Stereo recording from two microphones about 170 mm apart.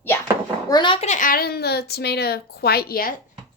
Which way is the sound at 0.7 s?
25° left (ahead or behind).